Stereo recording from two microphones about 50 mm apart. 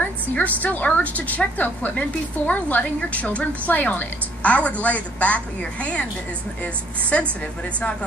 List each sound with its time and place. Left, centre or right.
0.0 s a woman's voice: left